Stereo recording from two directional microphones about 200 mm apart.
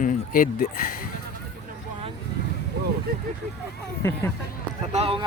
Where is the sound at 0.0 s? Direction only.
40° left (ahead or behind).